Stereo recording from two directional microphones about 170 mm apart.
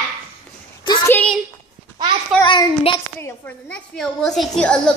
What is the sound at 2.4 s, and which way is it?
Speech, 30° left (ahead or behind).